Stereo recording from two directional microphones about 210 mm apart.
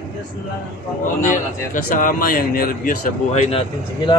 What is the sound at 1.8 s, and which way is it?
Speech, 40° left (ahead or behind).